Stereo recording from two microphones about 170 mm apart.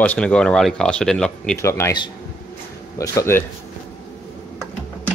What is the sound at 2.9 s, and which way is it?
Speech, 20° left (ahead or behind).